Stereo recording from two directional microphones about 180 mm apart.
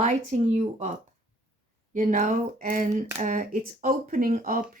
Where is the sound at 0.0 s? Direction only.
45° right (ahead or behind).